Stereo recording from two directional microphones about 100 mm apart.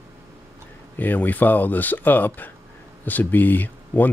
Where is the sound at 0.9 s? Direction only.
20° left (ahead or behind).